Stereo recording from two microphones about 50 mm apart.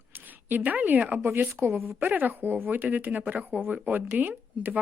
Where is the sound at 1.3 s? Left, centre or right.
Right.